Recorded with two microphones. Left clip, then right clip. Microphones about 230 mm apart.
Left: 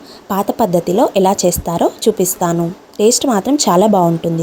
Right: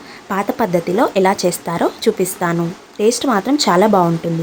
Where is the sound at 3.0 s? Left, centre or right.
Left.